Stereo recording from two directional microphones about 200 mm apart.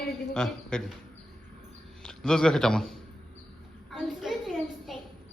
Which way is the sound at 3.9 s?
Centre (ahead or behind).